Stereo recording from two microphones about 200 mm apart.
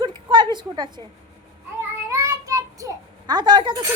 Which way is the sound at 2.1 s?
15° right (ahead or behind).